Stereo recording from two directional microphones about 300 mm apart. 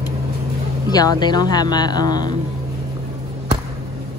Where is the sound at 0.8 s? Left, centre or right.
Centre.